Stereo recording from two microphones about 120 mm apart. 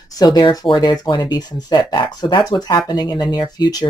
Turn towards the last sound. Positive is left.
turn(degrees=35)  # may be behind; listen again after turning